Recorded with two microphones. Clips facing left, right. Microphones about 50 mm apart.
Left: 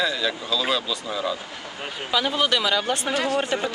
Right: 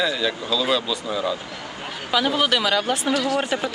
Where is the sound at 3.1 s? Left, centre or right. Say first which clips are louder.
Right 1 dB; left.